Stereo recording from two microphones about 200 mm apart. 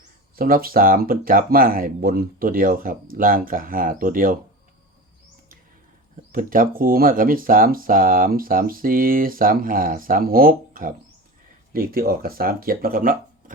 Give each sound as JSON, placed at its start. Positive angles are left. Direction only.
{"t": 0.3, "sound": "speech", "side_deg": -45}
{"t": 6.3, "sound": "speech", "side_deg": -45}